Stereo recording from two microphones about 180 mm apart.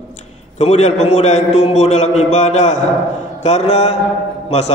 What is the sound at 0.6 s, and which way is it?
A man's voice, 40° left (ahead or behind).